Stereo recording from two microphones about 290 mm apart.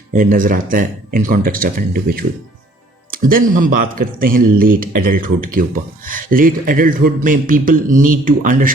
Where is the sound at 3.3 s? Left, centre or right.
Right.